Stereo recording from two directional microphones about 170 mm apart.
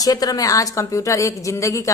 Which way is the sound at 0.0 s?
20° left (ahead or behind).